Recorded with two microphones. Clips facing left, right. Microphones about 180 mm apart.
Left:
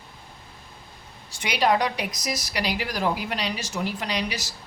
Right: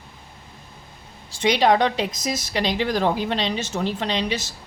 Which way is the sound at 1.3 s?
25° right (ahead or behind).